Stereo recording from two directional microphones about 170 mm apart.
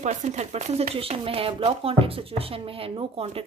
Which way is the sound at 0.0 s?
45° right (ahead or behind).